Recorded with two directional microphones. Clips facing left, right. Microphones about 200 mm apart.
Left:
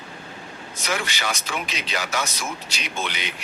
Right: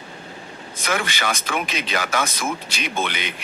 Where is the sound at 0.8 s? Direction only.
55° right (ahead or behind).